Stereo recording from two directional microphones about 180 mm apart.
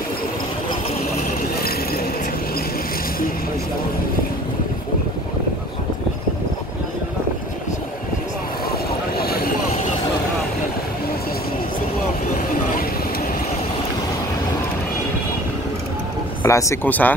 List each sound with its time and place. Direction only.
1.2 s a sound: 60° left (ahead or behind)
9.2 s vehicle: 55° left (ahead or behind)
16.4 s speech: 15° left (ahead or behind)